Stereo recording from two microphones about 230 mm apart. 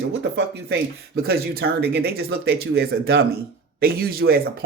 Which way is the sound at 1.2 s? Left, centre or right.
Right.